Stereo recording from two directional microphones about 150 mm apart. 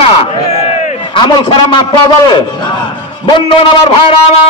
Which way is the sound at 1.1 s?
35° left (ahead or behind).